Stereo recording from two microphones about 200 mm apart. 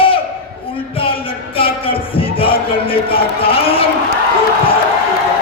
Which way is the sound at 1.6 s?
25° left (ahead or behind).